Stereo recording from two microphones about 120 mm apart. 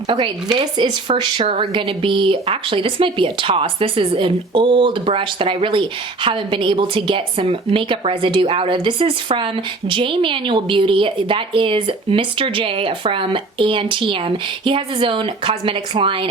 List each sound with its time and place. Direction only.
0.1 s a woman's voice: 40° right (ahead or behind)